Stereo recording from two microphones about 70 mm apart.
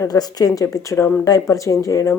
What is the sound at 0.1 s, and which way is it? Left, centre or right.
Speech, left.